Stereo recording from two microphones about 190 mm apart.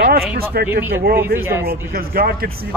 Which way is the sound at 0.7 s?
10° right (ahead or behind).